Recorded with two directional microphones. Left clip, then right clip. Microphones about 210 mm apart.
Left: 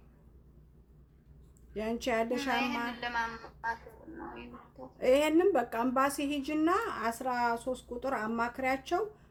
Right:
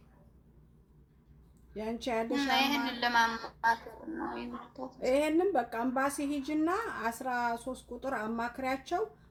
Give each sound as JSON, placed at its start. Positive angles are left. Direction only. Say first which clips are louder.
{"t": 1.7, "sound": "speech", "louder": "left 2 dB", "side_deg": -5}
{"t": 2.3, "sound": "a woman's voice", "louder": "right 3 dB", "side_deg": -40}
{"t": 4.9, "sound": "a woman's voice", "louder": "left 3 dB", "side_deg": -5}